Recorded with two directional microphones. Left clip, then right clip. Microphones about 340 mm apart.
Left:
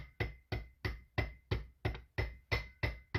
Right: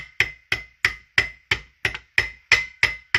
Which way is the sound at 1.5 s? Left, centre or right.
Centre.